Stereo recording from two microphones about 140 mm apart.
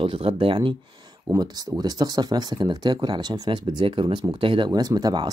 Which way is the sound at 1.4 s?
30° right (ahead or behind).